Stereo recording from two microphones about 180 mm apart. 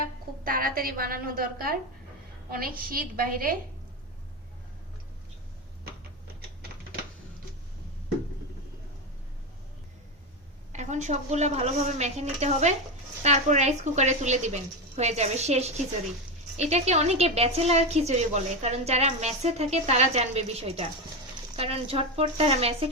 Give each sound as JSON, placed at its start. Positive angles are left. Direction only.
{"t": 0.4, "sound": "a woman's voice", "side_deg": -50}
{"t": 10.7, "sound": "a woman's voice", "side_deg": -40}